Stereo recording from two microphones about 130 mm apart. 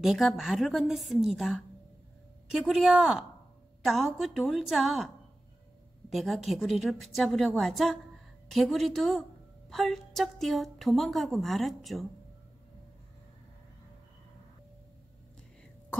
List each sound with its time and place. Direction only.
0.0 s a woman's voice: centre (ahead or behind)
2.7 s a woman's voice: 5° right (ahead or behind)
6.1 s a woman's voice: centre (ahead or behind)